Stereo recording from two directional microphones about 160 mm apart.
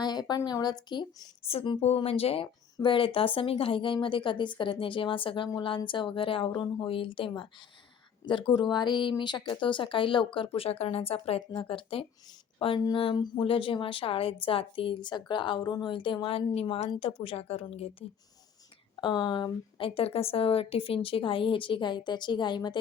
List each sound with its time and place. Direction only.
0.0 s speech: 25° left (ahead or behind)
18.9 s speech: 25° left (ahead or behind)